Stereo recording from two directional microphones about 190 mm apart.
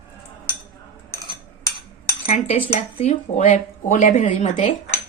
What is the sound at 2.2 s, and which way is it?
Speech, 30° left (ahead or behind).